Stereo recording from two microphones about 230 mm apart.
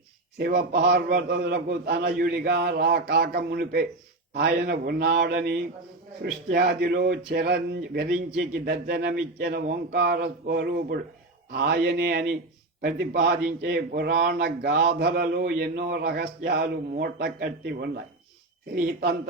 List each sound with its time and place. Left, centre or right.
0.3 s a man's voice: right